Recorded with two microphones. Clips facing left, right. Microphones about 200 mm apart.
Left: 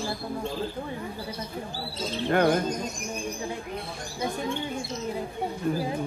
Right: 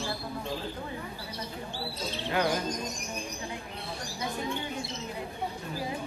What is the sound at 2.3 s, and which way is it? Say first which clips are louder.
Bird: left 7 dB; 55° left (ahead or behind).